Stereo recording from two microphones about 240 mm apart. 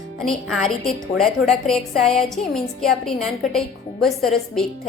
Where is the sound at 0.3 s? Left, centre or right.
Centre.